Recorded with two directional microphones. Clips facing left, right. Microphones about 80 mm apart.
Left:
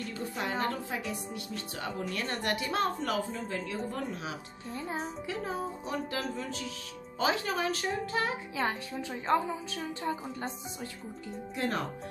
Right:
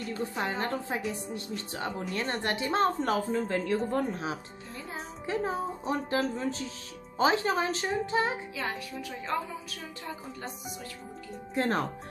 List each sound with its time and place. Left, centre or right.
0.1 s a woman's voice: right
8.6 s speech: left
11.5 s a woman's voice: right